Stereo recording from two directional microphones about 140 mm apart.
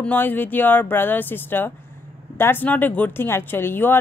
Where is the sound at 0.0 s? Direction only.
10° left (ahead or behind).